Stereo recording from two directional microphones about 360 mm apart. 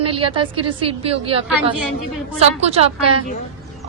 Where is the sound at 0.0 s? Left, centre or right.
Centre.